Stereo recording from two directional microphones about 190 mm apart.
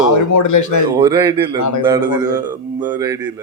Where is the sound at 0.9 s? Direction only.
20° right (ahead or behind).